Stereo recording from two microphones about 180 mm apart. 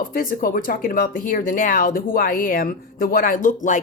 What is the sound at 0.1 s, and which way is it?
Speech, 50° left (ahead or behind).